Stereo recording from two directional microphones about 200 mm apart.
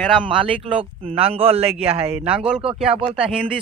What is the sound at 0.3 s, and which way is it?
Speech, 25° right (ahead or behind).